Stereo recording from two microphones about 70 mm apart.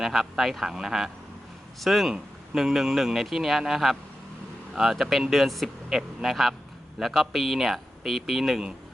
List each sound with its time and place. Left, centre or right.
0.0 s a man's voice: centre